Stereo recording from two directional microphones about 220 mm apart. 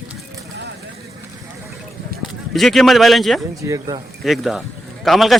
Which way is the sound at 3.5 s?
15° right (ahead or behind).